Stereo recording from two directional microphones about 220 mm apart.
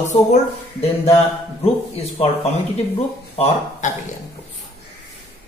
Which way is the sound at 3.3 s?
30° left (ahead or behind).